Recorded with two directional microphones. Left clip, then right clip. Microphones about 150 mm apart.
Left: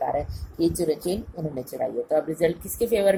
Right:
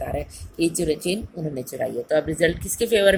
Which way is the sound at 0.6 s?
55° right (ahead or behind).